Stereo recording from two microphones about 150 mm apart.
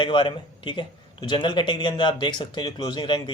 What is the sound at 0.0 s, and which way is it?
Speech, 30° left (ahead or behind).